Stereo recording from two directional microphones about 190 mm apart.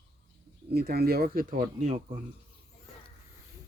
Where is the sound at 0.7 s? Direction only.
55° right (ahead or behind).